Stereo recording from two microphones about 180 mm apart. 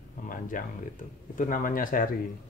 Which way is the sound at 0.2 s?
50° left (ahead or behind).